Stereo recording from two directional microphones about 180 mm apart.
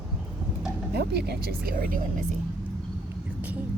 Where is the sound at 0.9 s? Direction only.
65° right (ahead or behind).